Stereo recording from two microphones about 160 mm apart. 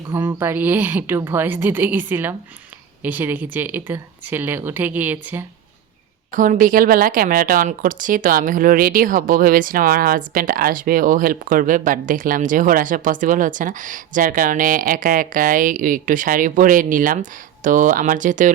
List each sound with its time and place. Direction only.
0.1 s a woman's voice: 15° right (ahead or behind)
6.3 s a woman's voice: 55° right (ahead or behind)